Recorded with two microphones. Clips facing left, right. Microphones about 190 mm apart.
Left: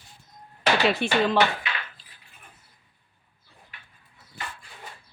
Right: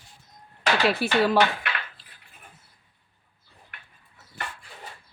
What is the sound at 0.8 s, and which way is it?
Speech, centre (ahead or behind).